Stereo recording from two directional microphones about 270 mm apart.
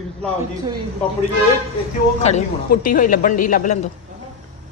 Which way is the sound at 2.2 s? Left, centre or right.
Left.